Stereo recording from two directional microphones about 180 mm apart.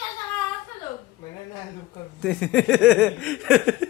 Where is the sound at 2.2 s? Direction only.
Centre (ahead or behind).